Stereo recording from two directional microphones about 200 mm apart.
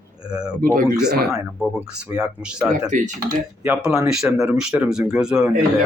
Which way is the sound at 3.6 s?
5° right (ahead or behind).